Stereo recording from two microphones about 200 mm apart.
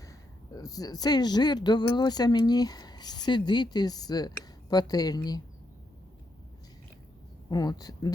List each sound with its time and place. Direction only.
0.5 s speech: 20° left (ahead or behind)
7.5 s speech: 20° left (ahead or behind)